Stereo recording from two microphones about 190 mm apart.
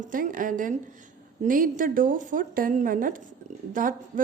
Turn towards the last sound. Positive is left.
turn(degrees=-45)  # may be behind; listen again after turning